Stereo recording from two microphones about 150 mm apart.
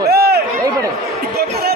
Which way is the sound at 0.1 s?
90° right.